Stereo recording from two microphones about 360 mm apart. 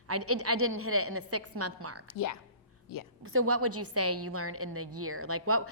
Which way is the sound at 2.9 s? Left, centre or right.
Left.